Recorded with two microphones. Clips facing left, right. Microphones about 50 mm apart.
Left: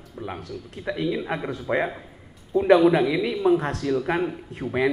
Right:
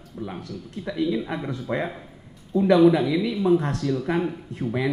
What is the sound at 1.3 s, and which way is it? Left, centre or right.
Speech, centre.